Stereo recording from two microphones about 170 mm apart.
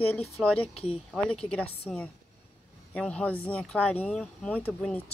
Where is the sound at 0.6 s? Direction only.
35° left (ahead or behind).